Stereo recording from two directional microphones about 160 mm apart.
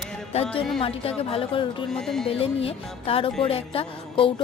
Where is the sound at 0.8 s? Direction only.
35° left (ahead or behind).